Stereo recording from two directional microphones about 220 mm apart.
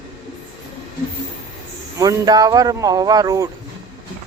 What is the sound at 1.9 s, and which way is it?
Mantra, 15° right (ahead or behind).